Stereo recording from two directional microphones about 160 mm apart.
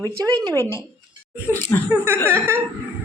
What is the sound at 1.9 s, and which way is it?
Speech, 15° right (ahead or behind).